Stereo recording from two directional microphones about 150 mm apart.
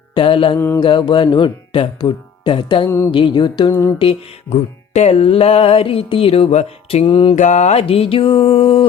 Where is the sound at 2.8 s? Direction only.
15° left (ahead or behind).